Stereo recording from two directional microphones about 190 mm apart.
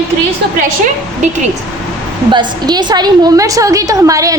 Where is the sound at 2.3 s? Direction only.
25° right (ahead or behind).